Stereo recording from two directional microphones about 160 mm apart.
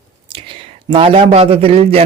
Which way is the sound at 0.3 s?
30° right (ahead or behind).